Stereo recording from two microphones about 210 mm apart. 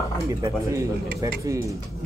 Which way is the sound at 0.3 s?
15° right (ahead or behind).